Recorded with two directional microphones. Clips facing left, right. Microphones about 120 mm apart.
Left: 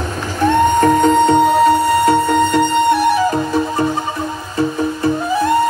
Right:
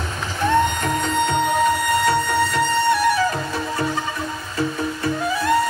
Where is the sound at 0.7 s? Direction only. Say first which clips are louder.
Left 11 dB; 45° left (ahead or behind).